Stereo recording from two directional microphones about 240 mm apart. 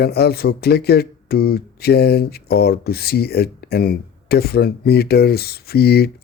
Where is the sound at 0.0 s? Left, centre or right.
Left.